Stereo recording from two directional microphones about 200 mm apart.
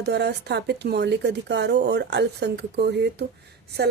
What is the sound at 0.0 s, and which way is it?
A woman's voice, 55° right (ahead or behind).